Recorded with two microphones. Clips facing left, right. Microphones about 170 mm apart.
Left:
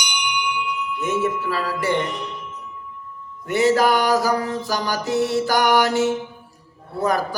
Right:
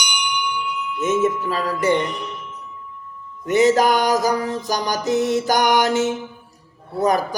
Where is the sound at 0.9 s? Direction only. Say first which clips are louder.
Right 4 dB; 20° right (ahead or behind).